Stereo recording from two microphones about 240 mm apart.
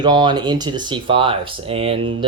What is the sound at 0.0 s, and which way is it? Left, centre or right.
Speech, centre.